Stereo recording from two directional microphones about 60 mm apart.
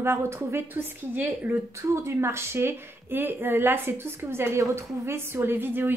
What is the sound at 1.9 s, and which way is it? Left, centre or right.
A woman's voice, right.